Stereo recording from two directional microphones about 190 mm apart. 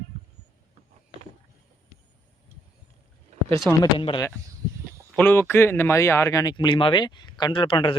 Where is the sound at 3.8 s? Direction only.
25° left (ahead or behind).